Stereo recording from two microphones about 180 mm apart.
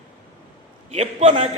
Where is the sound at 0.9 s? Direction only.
40° right (ahead or behind).